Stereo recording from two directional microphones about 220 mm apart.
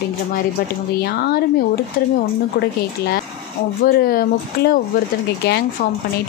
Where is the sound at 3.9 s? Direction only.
45° left (ahead or behind).